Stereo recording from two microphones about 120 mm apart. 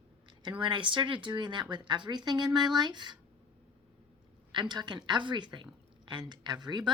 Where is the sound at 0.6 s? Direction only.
45° right (ahead or behind).